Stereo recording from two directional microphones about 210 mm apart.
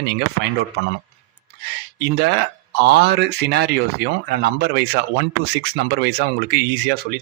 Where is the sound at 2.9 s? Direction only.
55° right (ahead or behind).